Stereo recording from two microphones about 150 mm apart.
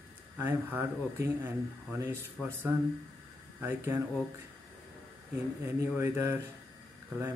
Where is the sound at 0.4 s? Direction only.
15° right (ahead or behind).